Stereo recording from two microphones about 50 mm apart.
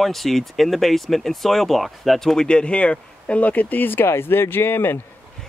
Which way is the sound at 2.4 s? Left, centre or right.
Left.